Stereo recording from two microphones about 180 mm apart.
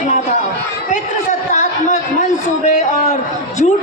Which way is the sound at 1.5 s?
40° left (ahead or behind).